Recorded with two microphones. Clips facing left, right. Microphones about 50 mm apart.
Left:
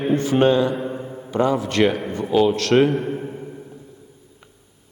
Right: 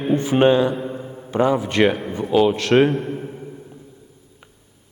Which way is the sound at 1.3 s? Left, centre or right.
Centre.